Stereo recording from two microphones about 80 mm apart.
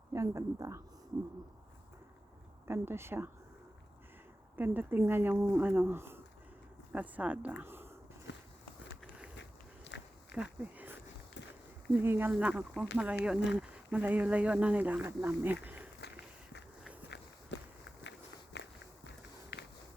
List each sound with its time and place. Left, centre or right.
0.1 s a woman's voice: right
2.6 s a woman's voice: right
4.5 s speech: right
7.6 s a sound: right
10.3 s a sound: centre
12.0 s speech: right